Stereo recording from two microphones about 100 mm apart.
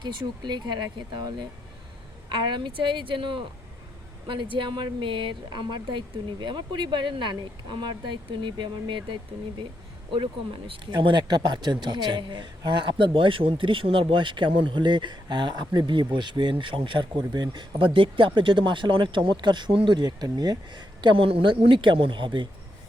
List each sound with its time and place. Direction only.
0.0 s speech: 50° right (ahead or behind); by 21.5 s 65° right (ahead or behind)
21.5 s speech: 55° right (ahead or behind)